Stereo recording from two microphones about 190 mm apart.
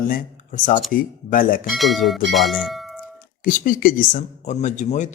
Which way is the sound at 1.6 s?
Centre (ahead or behind).